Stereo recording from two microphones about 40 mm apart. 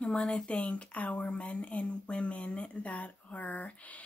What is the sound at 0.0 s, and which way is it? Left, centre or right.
Speech, left.